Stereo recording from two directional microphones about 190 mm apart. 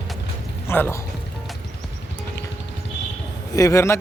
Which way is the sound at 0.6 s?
10° left (ahead or behind).